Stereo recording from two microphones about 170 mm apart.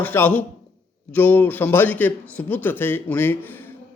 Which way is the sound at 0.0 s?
10° left (ahead or behind).